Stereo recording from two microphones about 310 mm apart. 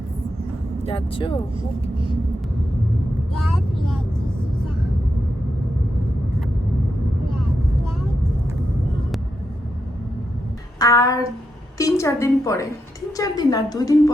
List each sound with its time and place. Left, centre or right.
0.9 s a woman's voice: centre
10.8 s child singing: centre
11.8 s a woman's voice: centre